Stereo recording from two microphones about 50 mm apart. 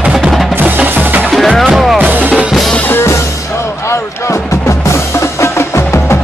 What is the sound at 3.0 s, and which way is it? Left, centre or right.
Music, left.